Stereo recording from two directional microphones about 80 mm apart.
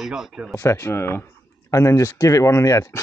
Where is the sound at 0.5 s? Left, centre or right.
Left.